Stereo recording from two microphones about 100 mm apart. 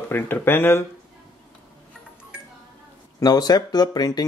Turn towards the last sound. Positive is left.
turn(degrees=40)  # may be behind; listen again after turning